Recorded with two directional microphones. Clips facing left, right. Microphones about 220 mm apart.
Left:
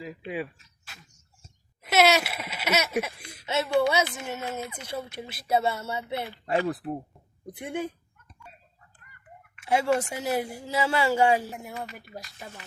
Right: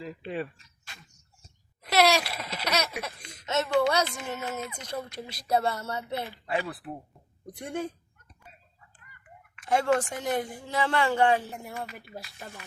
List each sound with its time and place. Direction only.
0.0 s speech: 5° left (ahead or behind)
6.4 s speech: 40° left (ahead or behind)
7.4 s speech: 5° left (ahead or behind)
9.6 s speech: 10° left (ahead or behind)